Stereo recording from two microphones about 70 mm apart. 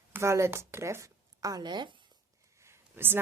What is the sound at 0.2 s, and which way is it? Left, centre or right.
A woman's voice, right.